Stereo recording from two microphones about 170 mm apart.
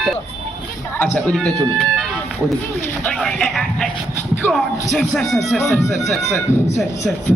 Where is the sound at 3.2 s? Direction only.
Centre (ahead or behind).